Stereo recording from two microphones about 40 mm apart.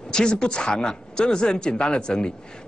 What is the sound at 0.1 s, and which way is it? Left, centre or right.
Speech, centre.